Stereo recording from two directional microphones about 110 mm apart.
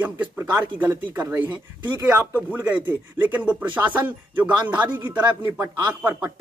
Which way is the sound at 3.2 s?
15° right (ahead or behind).